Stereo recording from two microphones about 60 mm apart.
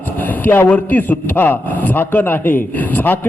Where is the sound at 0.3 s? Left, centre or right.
Left.